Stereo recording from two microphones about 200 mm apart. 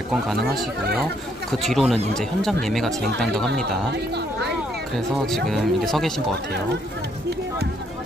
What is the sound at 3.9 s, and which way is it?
Speech, 55° right (ahead or behind).